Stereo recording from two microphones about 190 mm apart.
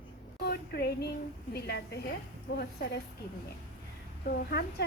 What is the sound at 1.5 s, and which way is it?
Speech, 55° left (ahead or behind).